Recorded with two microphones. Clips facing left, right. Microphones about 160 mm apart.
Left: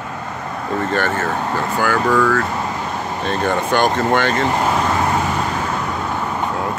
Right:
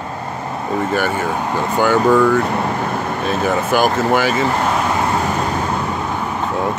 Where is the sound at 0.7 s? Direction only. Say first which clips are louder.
Right 1 dB; 10° right (ahead or behind).